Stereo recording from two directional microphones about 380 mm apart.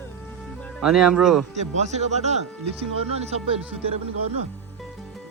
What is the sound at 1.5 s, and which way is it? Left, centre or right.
Speech, centre.